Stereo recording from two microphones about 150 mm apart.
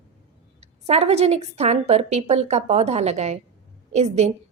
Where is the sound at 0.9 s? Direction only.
45° right (ahead or behind).